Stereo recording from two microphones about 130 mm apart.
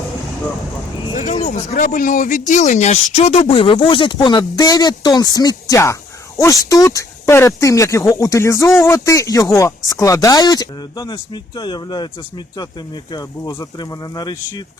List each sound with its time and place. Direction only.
1.1 s speech: 70° left (ahead or behind); by 12.0 s 35° left (ahead or behind)
13.1 s speech: 30° left (ahead or behind)